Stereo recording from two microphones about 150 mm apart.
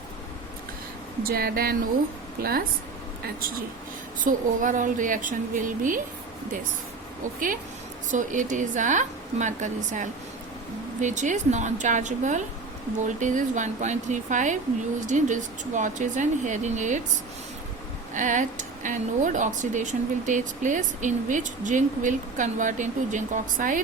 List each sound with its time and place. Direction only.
1.2 s a woman's voice: 85° right
4.2 s speech: 60° right (ahead or behind)
7.3 s speech: 65° right (ahead or behind)
18.1 s speech: 55° right (ahead or behind)